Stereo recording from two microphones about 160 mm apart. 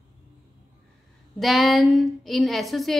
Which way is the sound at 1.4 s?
Centre (ahead or behind).